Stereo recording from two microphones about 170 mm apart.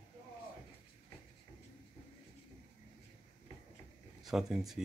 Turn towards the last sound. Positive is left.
turn(degrees=0)  # may be behind; listen again after turning